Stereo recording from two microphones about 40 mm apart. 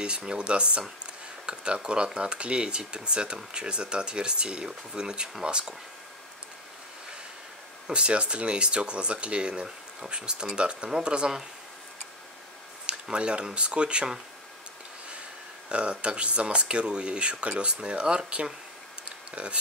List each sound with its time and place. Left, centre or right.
0.0 s speech: right
7.8 s speech: right
13.1 s speech: right
15.7 s speech: right
19.0 s a sound: right